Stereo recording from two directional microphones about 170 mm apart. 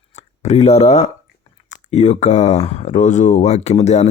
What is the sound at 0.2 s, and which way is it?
Speech, 40° left (ahead or behind).